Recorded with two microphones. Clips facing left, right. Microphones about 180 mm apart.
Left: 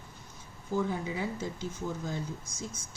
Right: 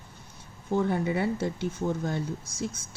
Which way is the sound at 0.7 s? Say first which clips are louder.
Right 5 dB; 65° right (ahead or behind).